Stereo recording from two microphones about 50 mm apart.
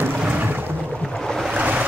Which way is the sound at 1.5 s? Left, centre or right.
Right.